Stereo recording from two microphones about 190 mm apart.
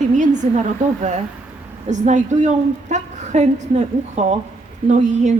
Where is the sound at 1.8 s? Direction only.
40° right (ahead or behind).